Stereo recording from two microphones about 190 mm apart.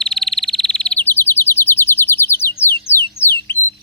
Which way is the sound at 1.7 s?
10° left (ahead or behind).